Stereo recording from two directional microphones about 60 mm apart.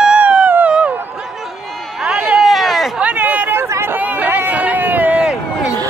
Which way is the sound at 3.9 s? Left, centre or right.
Right.